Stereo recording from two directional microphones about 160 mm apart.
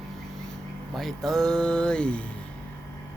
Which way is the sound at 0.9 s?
Centre (ahead or behind).